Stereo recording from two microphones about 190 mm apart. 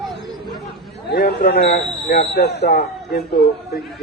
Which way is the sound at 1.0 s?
55° left (ahead or behind).